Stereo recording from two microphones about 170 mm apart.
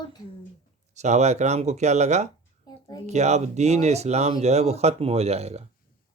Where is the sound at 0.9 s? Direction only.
40° right (ahead or behind).